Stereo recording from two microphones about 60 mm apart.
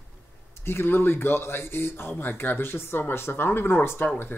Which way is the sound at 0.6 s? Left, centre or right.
Left.